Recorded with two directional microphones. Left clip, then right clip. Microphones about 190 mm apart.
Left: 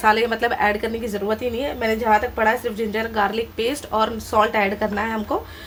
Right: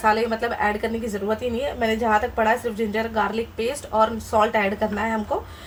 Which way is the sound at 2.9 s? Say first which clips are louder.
Left 3 dB; 30° left (ahead or behind).